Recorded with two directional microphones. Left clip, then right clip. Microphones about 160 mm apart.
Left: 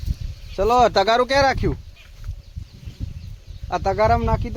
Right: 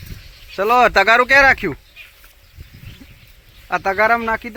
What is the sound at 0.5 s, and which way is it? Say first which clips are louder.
Speech: right 3 dB; 10° left (ahead or behind).